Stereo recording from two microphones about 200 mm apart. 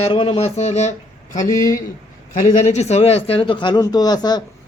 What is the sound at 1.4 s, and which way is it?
Speech, 15° left (ahead or behind).